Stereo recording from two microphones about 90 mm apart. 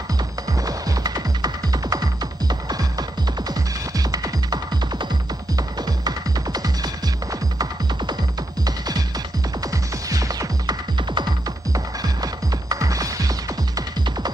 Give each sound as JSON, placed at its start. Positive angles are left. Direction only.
{"t": 0.7, "sound": "music", "side_deg": -45}
{"t": 8.6, "sound": "music", "side_deg": -45}
{"t": 10.0, "sound": "music", "side_deg": -40}
{"t": 11.0, "sound": "music", "side_deg": -55}
{"t": 11.7, "sound": "music", "side_deg": -45}